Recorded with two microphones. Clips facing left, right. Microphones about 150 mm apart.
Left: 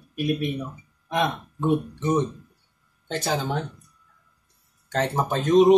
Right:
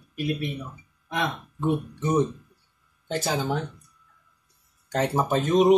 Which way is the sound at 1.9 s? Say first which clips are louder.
Even; 10° right (ahead or behind).